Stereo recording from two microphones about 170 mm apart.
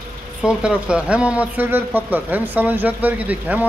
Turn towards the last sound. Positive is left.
turn(degrees=-10)  # may be behind; listen again after turning